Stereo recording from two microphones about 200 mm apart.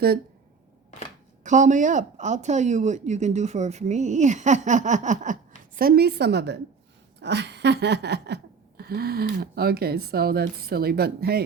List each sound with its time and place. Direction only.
1.5 s speech: 40° right (ahead or behind); by 6.6 s 55° right (ahead or behind)
7.2 s a sound: 60° right (ahead or behind)
8.8 s speech: 50° right (ahead or behind)